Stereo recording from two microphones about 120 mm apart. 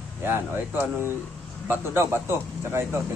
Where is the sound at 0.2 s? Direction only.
20° right (ahead or behind).